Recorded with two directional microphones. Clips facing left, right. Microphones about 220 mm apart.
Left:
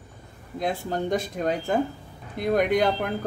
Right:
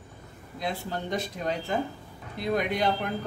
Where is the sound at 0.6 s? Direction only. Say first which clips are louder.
Left 5 dB; 50° left (ahead or behind).